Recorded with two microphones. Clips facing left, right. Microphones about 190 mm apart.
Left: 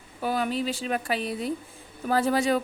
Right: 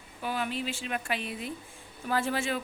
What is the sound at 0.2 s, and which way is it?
A woman's voice, 40° left (ahead or behind).